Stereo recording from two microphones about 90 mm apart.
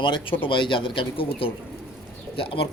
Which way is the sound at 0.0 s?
65° left (ahead or behind).